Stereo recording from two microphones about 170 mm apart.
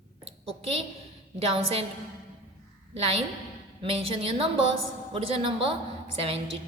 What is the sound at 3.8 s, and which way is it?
A woman's voice, 35° right (ahead or behind).